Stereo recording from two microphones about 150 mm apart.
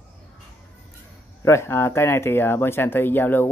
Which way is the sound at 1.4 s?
20° left (ahead or behind).